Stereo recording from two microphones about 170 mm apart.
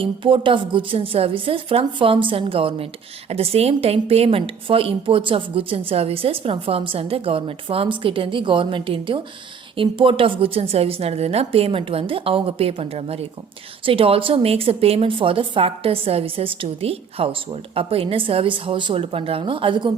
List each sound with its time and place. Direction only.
0.0 s a woman's voice: 30° right (ahead or behind)